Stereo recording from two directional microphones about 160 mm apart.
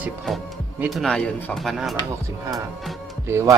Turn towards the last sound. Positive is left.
turn(degrees=-20)  # may be behind; listen again after turning